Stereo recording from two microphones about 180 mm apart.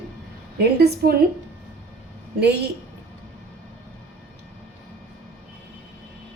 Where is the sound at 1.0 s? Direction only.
60° right (ahead or behind).